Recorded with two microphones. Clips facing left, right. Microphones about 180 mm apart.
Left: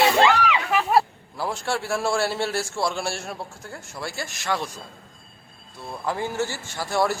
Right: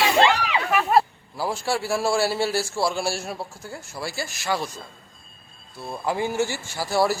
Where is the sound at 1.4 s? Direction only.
5° right (ahead or behind).